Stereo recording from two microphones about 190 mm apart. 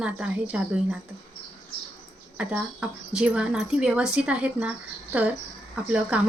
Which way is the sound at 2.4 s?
5° right (ahead or behind).